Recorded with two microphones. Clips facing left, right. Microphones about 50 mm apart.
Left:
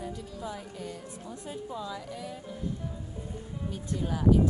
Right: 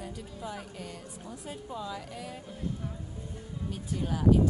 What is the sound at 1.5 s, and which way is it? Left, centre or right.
Speech, centre.